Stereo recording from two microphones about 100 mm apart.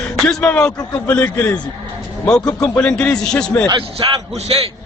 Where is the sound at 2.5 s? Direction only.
30° left (ahead or behind).